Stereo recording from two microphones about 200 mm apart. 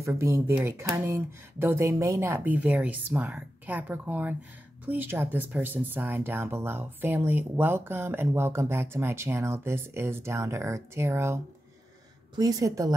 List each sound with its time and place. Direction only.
0.0 s speech: 15° right (ahead or behind)
12.4 s speech: 20° right (ahead or behind)